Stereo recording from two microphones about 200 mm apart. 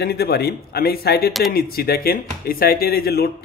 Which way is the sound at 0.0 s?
50° left (ahead or behind).